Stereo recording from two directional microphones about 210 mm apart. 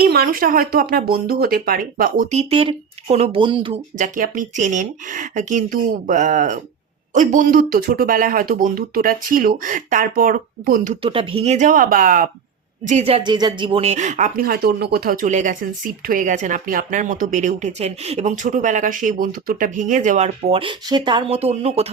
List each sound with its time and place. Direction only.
0.1 s speech: 45° right (ahead or behind); by 3.8 s 25° right (ahead or behind)
3.9 s speech: 40° right (ahead or behind)
11.0 s speech: 25° right (ahead or behind); by 12.3 s 40° right (ahead or behind)
12.9 s speech: 30° right (ahead or behind)